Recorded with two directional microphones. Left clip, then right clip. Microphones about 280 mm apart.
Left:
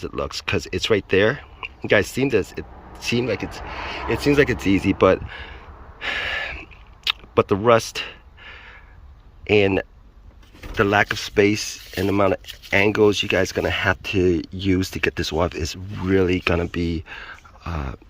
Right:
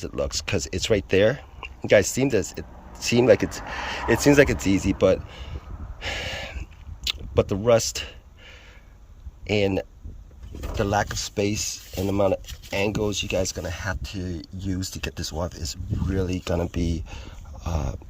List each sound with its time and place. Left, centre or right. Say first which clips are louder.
0.0 s speech: left 1 dB; centre
6.0 s a sound: left 6 dB; centre
9.5 s speech: left 6 dB; centre
10.8 s speech: left 6 dB; centre
11.4 s speech: left 6 dB; centre
13.2 s speech: left 6 dB; left
14.3 s speech: left 11 dB; centre
14.8 s speech: left 9 dB; left
16.3 s speech: left 6 dB; centre